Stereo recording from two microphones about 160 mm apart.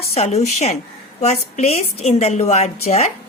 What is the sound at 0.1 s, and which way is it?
A woman's voice, 40° left (ahead or behind).